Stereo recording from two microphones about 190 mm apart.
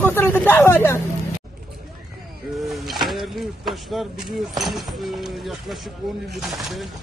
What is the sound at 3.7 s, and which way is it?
Speech, centre (ahead or behind).